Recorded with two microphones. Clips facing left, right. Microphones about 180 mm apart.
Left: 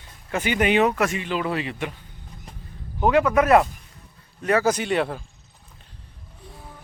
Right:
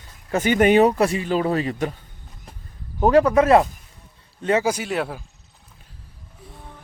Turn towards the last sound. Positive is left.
turn(degrees=0)  # may be behind; listen again after turning